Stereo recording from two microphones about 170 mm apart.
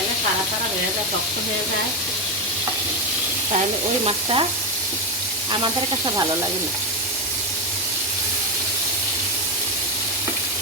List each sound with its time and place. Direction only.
4.0 s stir: 30° right (ahead or behind)
5.5 s snake: 30° right (ahead or behind)